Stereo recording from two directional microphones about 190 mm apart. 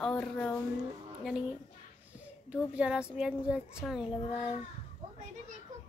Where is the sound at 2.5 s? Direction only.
5° right (ahead or behind).